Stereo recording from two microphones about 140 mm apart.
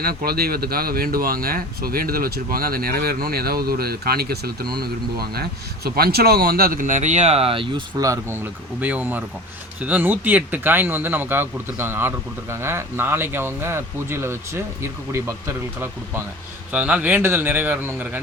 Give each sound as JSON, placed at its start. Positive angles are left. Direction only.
{"t": 0.0, "sound": "speech", "side_deg": -90}
{"t": 8.0, "sound": "speech", "side_deg": -20}
{"t": 8.8, "sound": "speech", "side_deg": -10}